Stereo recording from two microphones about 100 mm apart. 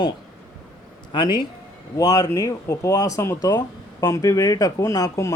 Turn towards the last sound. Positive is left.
turn(degrees=35)  # may be behind; listen again after turning